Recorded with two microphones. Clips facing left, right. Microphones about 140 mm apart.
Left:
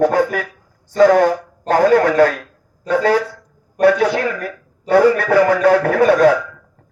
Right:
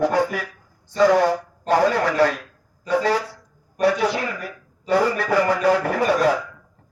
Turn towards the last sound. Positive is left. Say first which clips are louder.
# left 7 dB
turn(degrees=65)  # may be behind; listen again after turning